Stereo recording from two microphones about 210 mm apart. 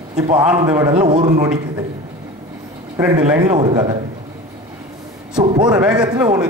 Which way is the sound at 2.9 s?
20° right (ahead or behind).